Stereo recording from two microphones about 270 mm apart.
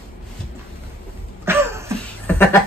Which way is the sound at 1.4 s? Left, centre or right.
Centre.